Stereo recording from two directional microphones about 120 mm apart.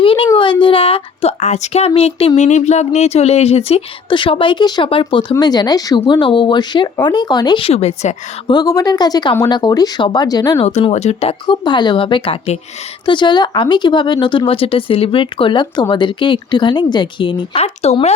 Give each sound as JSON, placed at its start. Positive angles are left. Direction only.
{"t": 0.0, "sound": "a sound", "side_deg": 45}
{"t": 0.6, "sound": "speech", "side_deg": 50}
{"t": 1.9, "sound": "speech", "side_deg": 55}
{"t": 2.4, "sound": "speech", "side_deg": 75}
{"t": 5.4, "sound": "speech", "side_deg": 35}
{"t": 7.6, "sound": "speech", "side_deg": 60}
{"t": 8.4, "sound": "speech", "side_deg": 35}
{"t": 10.9, "sound": "speech", "side_deg": 65}
{"t": 11.4, "sound": "speech", "side_deg": 40}
{"t": 13.1, "sound": "speech", "side_deg": 40}
{"t": 17.5, "sound": "speech", "side_deg": 60}